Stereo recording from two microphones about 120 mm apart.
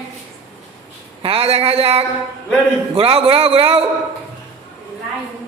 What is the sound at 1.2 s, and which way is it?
A man's voice, 55° right (ahead or behind).